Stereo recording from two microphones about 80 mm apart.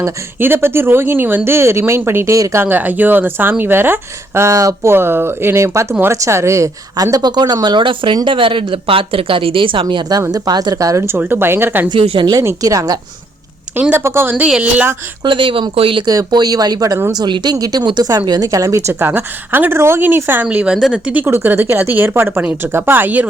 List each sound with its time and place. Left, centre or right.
0.3 s speech: right
2.6 s speech: right
10.3 s speech: right
11.2 s speech: right
11.9 s speech: right
12.4 s speech: right
13.9 s speech: right
14.3 s a woman's voice: centre
15.2 s speech: right
16.0 s speech: right
18.3 s a woman's voice: right; by 21.2 s centre
21.2 s speech: right